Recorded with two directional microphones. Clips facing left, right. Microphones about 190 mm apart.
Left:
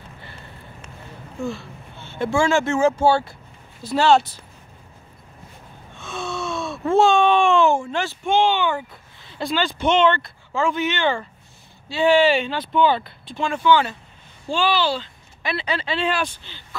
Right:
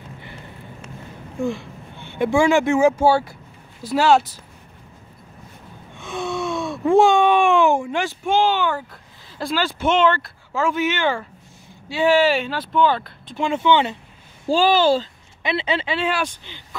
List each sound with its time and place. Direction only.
1.4 s speech: 15° right (ahead or behind)
5.9 s gasp: 15° right (ahead or behind)
9.4 s speech: 5° right (ahead or behind)
13.4 s speech: 20° right (ahead or behind)
14.5 s speech: 40° right (ahead or behind)
15.4 s speech: 25° right (ahead or behind)
15.9 s speech: 10° right (ahead or behind)